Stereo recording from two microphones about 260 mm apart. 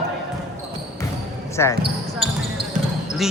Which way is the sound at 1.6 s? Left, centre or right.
Centre.